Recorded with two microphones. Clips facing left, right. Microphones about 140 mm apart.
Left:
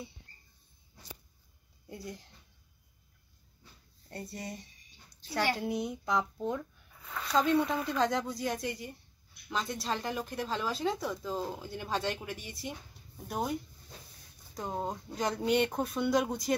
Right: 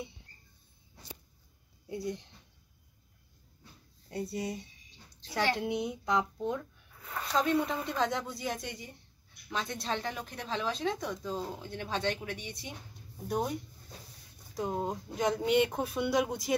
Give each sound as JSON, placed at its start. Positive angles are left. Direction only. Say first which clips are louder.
{"t": 1.9, "sound": "speech", "louder": "right 7 dB", "side_deg": 0}
{"t": 4.1, "sound": "a woman's voice", "louder": "right 6 dB", "side_deg": 0}